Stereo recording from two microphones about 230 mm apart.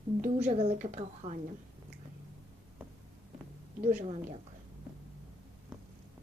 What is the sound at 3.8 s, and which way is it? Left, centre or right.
Speech, right.